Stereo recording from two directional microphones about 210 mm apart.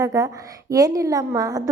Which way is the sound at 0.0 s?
15° right (ahead or behind).